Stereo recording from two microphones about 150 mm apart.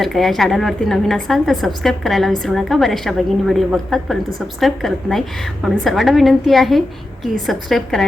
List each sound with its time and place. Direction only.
0.0 s a woman's voice: centre (ahead or behind)